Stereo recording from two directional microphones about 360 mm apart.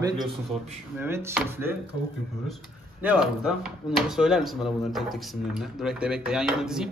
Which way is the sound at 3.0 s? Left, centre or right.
Centre.